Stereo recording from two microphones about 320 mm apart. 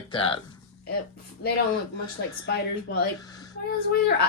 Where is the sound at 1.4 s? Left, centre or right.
Left.